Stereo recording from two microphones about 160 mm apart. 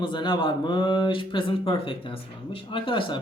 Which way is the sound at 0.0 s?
30° left (ahead or behind).